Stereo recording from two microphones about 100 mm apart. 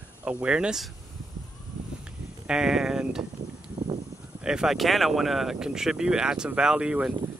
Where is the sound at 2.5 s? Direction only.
5° right (ahead or behind).